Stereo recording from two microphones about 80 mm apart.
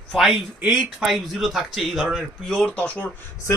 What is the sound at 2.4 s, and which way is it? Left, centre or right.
Speech, centre.